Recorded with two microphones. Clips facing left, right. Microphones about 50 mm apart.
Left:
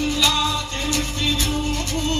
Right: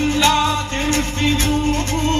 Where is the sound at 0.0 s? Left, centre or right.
Right.